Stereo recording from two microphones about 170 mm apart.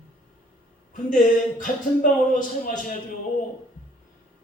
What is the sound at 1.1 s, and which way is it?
Speech, 50° left (ahead or behind).